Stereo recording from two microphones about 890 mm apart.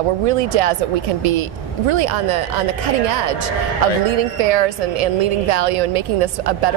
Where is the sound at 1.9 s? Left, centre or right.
Right.